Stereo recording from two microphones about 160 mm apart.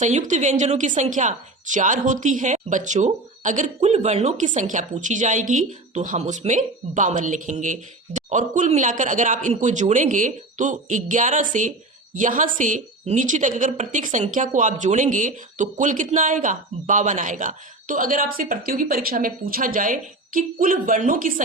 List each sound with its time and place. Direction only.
0.0 s a woman's voice: 50° right (ahead or behind)